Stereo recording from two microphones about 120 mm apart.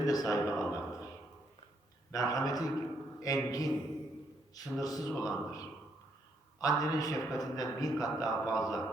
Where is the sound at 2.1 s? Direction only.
30° left (ahead or behind).